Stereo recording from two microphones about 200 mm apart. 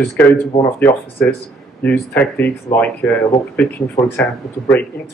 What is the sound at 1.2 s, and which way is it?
Speech, 10° left (ahead or behind).